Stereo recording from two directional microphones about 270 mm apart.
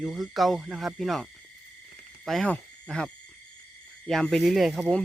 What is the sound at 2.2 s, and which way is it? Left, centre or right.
Owl, centre.